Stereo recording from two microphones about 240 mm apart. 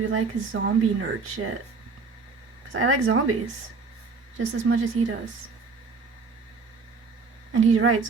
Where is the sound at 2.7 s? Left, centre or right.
Right.